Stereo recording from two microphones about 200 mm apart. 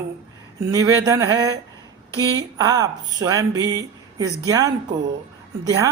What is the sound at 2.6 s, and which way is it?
Speech, 20° right (ahead or behind).